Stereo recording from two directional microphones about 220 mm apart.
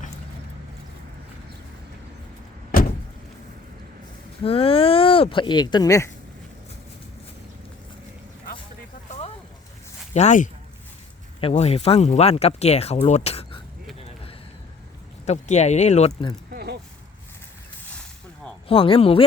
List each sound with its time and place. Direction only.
4.4 s speech: 25° left (ahead or behind)
9.0 s a sound: 30° left (ahead or behind)
10.2 s speech: 35° left (ahead or behind)
15.3 s speech: 30° left (ahead or behind)
16.5 s a sound: 45° right (ahead or behind)
18.7 s speech: 25° left (ahead or behind)